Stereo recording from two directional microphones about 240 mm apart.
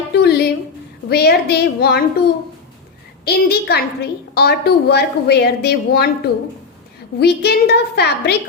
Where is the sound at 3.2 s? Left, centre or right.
Left.